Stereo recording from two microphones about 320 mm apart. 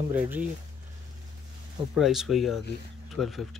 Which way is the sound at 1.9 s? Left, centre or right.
Centre.